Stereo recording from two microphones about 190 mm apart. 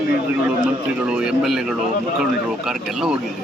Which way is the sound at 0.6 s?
5° right (ahead or behind).